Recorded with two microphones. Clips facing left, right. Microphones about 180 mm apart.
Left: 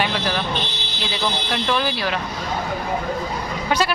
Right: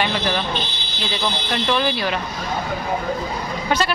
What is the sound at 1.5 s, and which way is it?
Speech, centre (ahead or behind).